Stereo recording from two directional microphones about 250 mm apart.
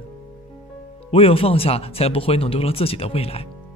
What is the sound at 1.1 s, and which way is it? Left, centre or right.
Speech, left.